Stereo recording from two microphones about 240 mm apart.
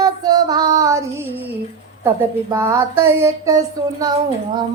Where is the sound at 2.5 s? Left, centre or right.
Centre.